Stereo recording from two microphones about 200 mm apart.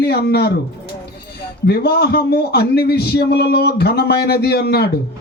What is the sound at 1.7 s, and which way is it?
Speech, 50° left (ahead or behind).